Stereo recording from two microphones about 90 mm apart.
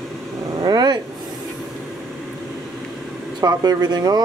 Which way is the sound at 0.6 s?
50° right (ahead or behind).